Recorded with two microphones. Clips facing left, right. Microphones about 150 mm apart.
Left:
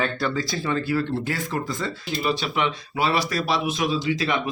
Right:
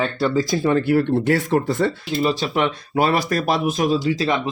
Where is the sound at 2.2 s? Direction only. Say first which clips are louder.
Right 3 dB; 40° right (ahead or behind).